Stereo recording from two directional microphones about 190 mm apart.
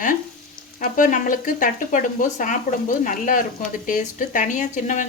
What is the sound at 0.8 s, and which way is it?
Speech, 45° left (ahead or behind).